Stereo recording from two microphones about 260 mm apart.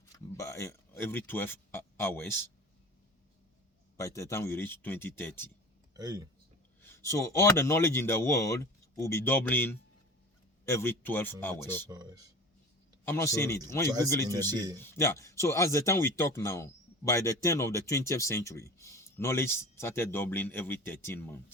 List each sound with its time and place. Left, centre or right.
0.3 s speech: centre
3.9 s speech: centre
5.9 s speech: centre
6.8 s speech: centre
11.9 s speech: centre
13.1 s speech: centre